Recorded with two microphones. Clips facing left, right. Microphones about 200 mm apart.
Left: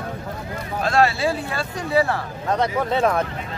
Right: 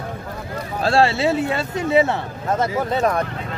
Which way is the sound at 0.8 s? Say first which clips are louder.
Right 2 dB; 30° right (ahead or behind).